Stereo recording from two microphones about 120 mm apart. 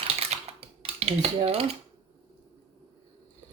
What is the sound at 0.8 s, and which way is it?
Dishes, 60° right (ahead or behind).